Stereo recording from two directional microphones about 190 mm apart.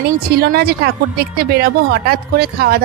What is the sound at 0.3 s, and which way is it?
A woman's voice, 55° right (ahead or behind).